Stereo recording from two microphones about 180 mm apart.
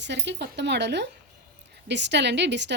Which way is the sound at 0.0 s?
75° right (ahead or behind).